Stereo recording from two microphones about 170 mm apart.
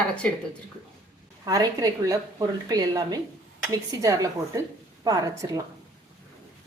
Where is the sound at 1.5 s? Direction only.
20° right (ahead or behind).